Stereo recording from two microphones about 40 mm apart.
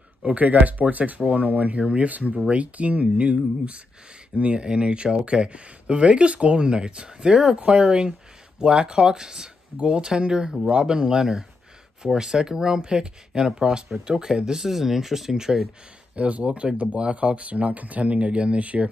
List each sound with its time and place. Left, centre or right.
0.2 s speech: right
1.8 s speech: right
2.0 s speech: right; by 14.7 s centre
14.7 s speech: centre
16.2 s speech: right